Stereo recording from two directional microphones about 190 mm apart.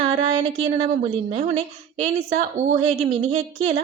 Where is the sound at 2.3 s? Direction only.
40° right (ahead or behind).